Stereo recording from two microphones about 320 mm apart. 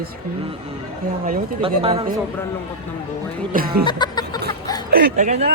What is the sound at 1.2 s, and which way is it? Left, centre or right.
Speech, right.